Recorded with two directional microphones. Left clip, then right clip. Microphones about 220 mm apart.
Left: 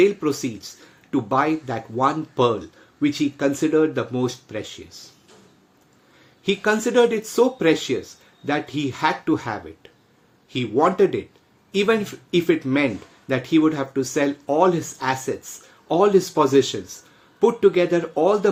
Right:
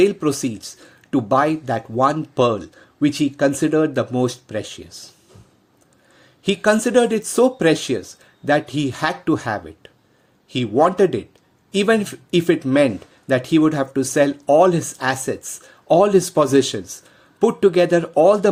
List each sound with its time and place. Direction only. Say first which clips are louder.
0.0 s speech: right 2 dB; 50° right (ahead or behind)
6.4 s speech: right 3 dB; 45° right (ahead or behind)